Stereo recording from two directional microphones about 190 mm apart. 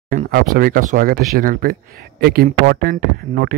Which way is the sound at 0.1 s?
45° right (ahead or behind).